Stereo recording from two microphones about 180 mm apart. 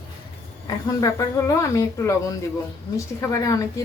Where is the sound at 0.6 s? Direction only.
20° left (ahead or behind).